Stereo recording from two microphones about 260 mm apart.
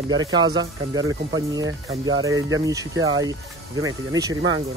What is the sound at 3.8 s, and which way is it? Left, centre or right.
Speech, centre.